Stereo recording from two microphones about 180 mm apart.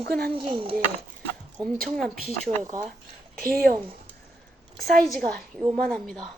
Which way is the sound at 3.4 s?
55° right (ahead or behind).